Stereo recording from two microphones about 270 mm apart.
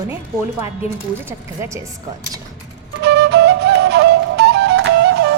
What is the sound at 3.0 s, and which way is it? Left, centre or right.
Flute, right.